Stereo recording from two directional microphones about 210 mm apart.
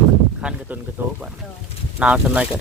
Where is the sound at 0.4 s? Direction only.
5° right (ahead or behind).